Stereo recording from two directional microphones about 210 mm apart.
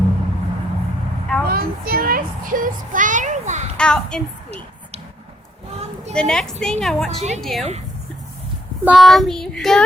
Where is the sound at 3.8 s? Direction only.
5° left (ahead or behind).